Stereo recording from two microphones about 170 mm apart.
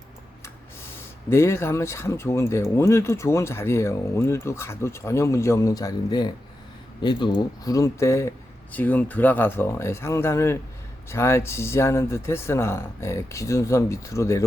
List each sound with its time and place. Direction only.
1.3 s speech: 15° left (ahead or behind)